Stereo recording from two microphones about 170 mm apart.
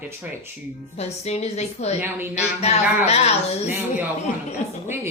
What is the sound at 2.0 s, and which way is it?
Speech, 10° right (ahead or behind).